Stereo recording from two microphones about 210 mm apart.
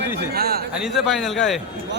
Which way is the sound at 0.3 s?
45° right (ahead or behind).